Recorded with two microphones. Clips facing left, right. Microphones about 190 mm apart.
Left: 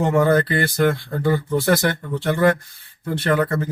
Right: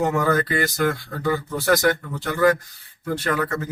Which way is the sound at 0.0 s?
30° left (ahead or behind).